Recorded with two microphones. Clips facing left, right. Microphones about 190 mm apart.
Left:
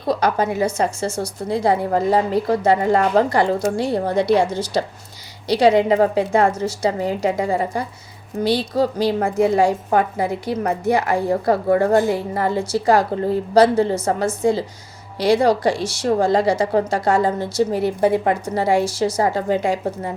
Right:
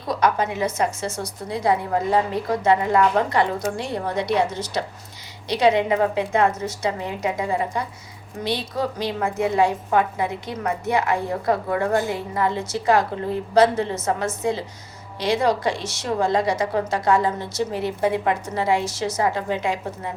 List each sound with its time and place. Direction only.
0.1 s a woman's voice: 35° left (ahead or behind)